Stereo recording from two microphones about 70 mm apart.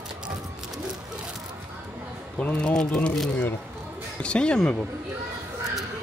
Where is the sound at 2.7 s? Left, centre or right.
Centre.